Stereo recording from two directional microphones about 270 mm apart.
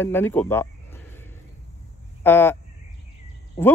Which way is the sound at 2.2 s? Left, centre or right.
Centre.